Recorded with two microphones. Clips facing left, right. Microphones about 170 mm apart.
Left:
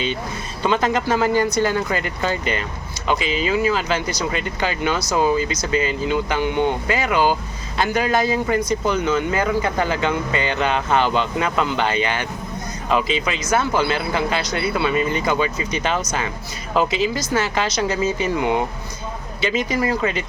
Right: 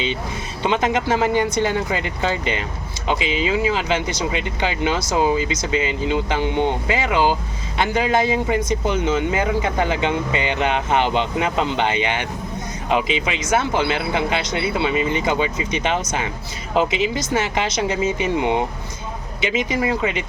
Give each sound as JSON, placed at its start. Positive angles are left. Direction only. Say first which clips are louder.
{"t": 0.6, "sound": "a man's voice", "louder": "even", "side_deg": -20}